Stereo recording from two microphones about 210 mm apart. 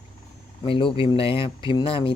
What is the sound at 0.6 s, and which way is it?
Speech, 25° left (ahead or behind).